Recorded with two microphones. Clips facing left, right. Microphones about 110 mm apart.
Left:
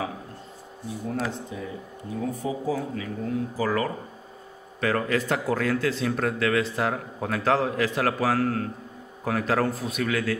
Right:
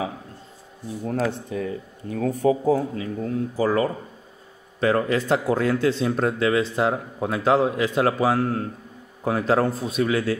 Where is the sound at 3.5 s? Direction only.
25° right (ahead or behind).